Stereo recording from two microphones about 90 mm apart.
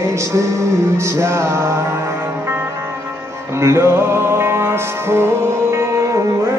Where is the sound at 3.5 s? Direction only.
30° right (ahead or behind).